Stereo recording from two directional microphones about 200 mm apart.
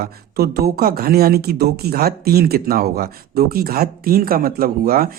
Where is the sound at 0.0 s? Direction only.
50° right (ahead or behind).